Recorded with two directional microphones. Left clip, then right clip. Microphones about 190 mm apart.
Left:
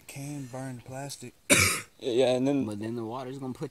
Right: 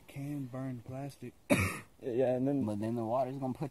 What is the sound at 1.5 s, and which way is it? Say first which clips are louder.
Cough: left 8 dB; 50° left (ahead or behind).